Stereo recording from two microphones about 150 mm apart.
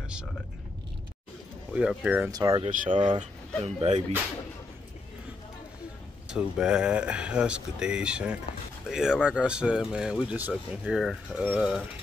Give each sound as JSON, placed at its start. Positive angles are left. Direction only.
{"t": 1.7, "sound": "speech", "side_deg": -5}
{"t": 2.3, "sound": "speech", "side_deg": -25}
{"t": 2.7, "sound": "speech", "side_deg": -60}
{"t": 6.2, "sound": "speech", "side_deg": -5}